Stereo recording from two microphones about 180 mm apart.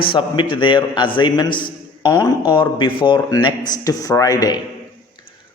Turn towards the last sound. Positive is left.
turn(degrees=20)  # may be behind; listen again after turning